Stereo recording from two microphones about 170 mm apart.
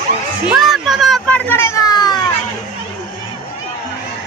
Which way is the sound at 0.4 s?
5° right (ahead or behind).